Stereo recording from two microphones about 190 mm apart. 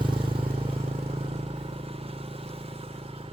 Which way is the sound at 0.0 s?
25° right (ahead or behind).